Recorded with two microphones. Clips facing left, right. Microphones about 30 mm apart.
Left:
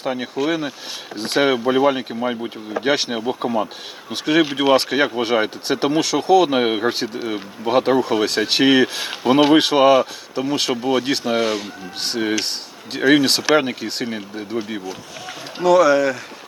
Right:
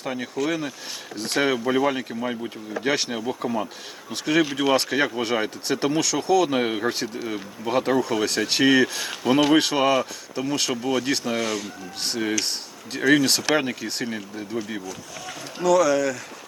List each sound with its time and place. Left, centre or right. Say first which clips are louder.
0.0 s speech: left 5 dB; left
2.8 s speech: left 4 dB; left
6.9 s speech: left 4 dB; left
15.5 s speech: left 5 dB; left